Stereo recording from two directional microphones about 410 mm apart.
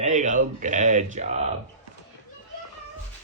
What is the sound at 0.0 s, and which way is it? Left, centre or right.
Speech, centre.